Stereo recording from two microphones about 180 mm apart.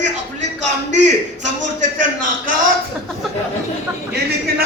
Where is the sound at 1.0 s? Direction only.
40° right (ahead or behind).